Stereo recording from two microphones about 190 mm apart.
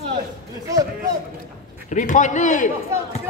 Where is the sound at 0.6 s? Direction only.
20° right (ahead or behind).